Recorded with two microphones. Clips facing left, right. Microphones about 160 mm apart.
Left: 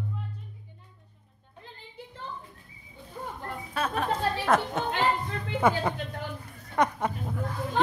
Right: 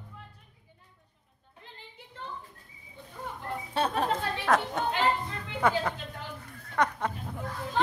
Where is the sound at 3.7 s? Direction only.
30° right (ahead or behind).